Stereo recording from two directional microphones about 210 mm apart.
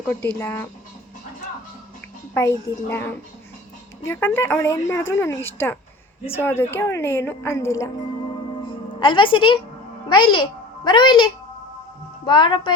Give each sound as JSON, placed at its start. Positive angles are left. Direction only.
{"t": 0.3, "sound": "a woman's voice", "side_deg": 10}
{"t": 2.3, "sound": "a woman's voice", "side_deg": 10}
{"t": 8.6, "sound": "music", "side_deg": 25}
{"t": 10.1, "sound": "a woman's voice", "side_deg": 25}